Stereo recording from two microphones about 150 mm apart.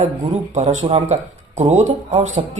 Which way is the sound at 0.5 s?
50° right (ahead or behind).